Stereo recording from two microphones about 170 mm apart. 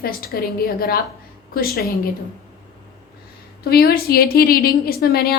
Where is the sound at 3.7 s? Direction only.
65° left (ahead or behind).